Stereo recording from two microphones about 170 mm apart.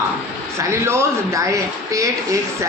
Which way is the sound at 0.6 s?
15° right (ahead or behind).